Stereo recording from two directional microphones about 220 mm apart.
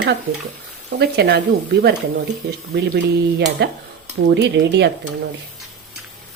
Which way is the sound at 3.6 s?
50° right (ahead or behind).